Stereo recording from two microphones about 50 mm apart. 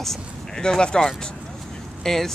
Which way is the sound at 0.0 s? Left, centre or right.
Centre.